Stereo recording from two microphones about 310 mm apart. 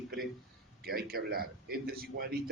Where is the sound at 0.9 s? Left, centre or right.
Right.